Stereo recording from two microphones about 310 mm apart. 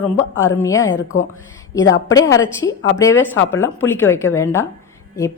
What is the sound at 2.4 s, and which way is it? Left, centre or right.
Speech, left.